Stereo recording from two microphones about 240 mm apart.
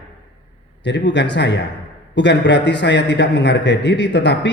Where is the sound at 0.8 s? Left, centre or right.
Left.